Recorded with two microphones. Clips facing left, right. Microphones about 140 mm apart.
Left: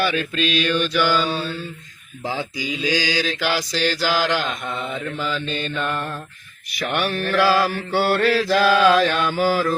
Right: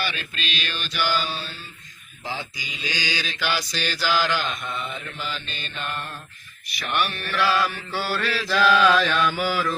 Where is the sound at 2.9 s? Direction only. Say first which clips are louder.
Left 8 dB; 90° left.